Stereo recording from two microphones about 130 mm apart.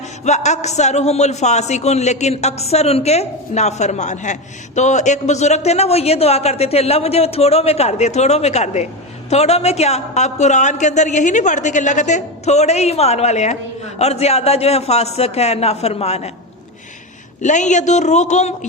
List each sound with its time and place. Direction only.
0.3 s a man's voice: 60° left (ahead or behind)
17.4 s a man's voice: 70° left (ahead or behind)